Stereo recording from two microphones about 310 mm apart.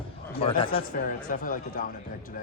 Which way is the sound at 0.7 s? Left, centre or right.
Left.